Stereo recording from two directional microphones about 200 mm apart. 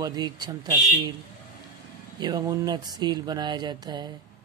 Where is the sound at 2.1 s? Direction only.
20° right (ahead or behind).